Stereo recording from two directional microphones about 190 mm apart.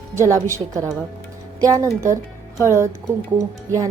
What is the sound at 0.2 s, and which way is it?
A woman's voice, 15° right (ahead or behind).